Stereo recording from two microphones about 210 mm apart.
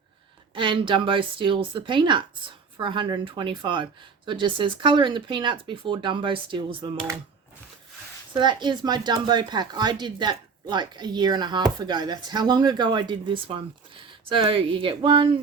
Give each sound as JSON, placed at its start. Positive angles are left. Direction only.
{"t": 0.5, "sound": "speech", "side_deg": -25}
{"t": 8.3, "sound": "speech", "side_deg": -20}